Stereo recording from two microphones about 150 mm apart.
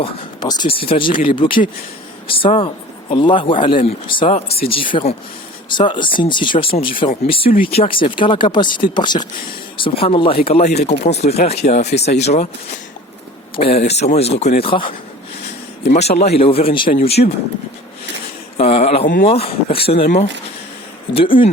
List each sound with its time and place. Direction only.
0.0 s speech: 30° left (ahead or behind); by 12.5 s 45° left (ahead or behind)
13.6 s speech: 40° left (ahead or behind)
16.0 s speech: 45° left (ahead or behind)
18.5 s speech: 40° left (ahead or behind)
21.1 s speech: 40° left (ahead or behind)